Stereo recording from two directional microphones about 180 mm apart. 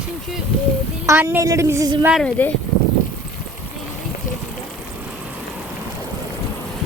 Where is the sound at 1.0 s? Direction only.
10° right (ahead or behind).